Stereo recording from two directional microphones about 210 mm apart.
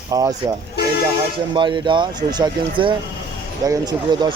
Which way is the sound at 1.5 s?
20° right (ahead or behind).